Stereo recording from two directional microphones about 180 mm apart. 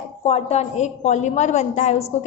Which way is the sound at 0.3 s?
35° left (ahead or behind).